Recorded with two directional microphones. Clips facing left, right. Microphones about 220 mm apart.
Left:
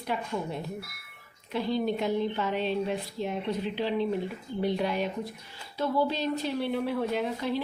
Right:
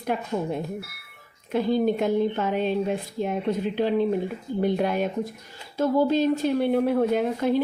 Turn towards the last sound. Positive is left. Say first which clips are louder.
# right 7 dB
turn(degrees=-50)  # may be behind; listen again after turning